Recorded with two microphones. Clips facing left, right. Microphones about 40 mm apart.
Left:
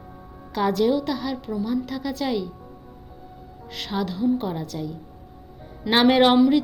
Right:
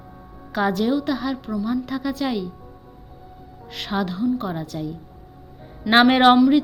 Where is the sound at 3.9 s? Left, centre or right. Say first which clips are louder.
Right 2 dB; right.